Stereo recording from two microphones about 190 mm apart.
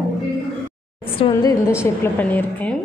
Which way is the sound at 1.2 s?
20° left (ahead or behind).